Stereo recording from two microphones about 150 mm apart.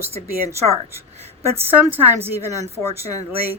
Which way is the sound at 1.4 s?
15° right (ahead or behind).